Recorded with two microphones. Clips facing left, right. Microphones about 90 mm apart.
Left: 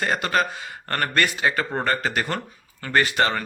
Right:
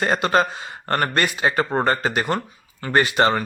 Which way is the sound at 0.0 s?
25° right (ahead or behind).